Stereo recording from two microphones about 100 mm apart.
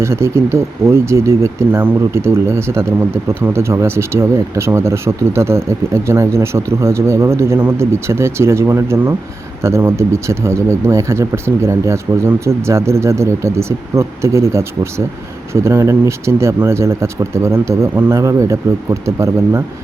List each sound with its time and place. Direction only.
0.0 s speech: 25° right (ahead or behind)